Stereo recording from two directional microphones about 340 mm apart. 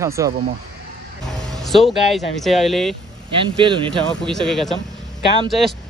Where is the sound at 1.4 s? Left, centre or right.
Centre.